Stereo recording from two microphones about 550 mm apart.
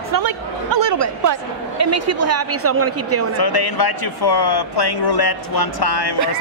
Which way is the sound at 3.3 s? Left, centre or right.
Left.